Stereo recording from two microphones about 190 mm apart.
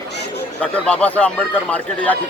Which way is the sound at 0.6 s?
5° left (ahead or behind).